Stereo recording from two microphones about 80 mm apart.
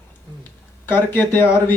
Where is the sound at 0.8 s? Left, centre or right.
Left.